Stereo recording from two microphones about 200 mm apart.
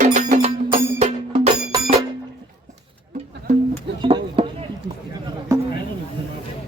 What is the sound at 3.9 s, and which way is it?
Chop, 25° right (ahead or behind).